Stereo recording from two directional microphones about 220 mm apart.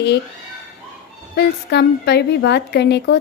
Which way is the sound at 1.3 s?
50° left (ahead or behind).